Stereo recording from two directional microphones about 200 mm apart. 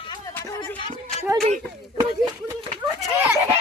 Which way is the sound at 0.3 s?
10° left (ahead or behind).